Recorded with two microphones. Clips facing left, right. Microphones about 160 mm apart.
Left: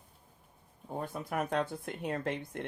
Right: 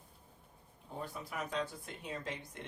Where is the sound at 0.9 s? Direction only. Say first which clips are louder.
Left 7 dB; 50° left (ahead or behind).